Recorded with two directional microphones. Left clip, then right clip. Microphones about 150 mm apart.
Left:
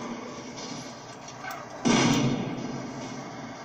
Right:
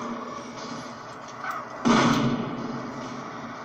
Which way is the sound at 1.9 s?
15° left (ahead or behind).